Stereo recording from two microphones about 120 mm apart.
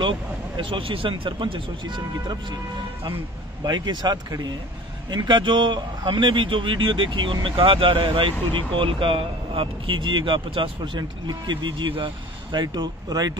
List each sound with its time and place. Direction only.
0.6 s a man's voice: 45° right (ahead or behind)
3.6 s a man's voice: 35° right (ahead or behind)